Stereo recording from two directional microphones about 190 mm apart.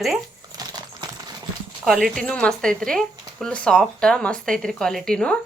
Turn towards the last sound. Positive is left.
turn(degrees=5)  # may be behind; listen again after turning